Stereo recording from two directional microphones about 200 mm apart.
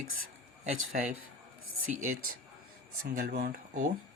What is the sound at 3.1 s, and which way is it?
Speech, 50° right (ahead or behind).